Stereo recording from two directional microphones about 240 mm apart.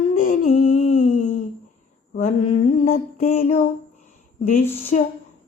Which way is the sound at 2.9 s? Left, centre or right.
Left.